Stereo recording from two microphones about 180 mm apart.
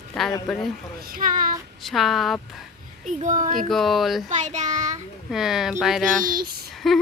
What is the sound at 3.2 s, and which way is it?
Speech, 45° right (ahead or behind).